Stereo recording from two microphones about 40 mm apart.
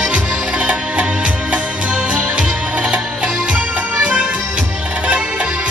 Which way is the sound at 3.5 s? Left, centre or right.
Right.